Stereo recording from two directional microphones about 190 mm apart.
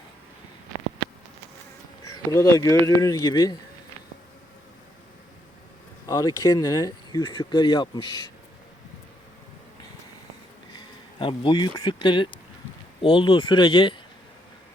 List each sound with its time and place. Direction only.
2.3 s speech: 15° left (ahead or behind)
6.1 s speech: 20° left (ahead or behind)
10.8 s speech: 25° left (ahead or behind)